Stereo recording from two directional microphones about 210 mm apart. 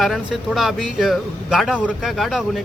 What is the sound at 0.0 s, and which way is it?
Speech, centre (ahead or behind).